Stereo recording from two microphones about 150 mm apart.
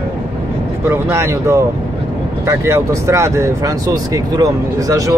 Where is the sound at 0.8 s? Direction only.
15° right (ahead or behind).